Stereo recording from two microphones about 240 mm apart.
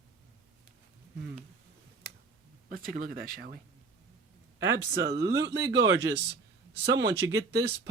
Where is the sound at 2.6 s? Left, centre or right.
Right.